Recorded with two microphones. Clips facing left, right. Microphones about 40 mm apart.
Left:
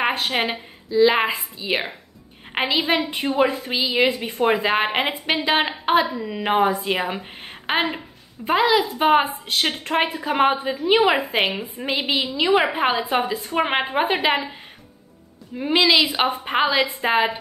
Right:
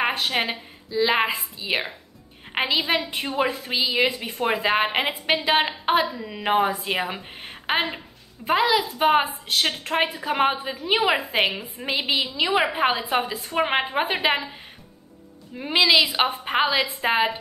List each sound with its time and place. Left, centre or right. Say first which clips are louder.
0.2 s a woman's voice: left 2 dB; centre
0.8 s a woman's voice: left 4 dB; centre
13.0 s a woman's voice: left 2 dB; centre
15.5 s a woman's voice: left 1 dB; centre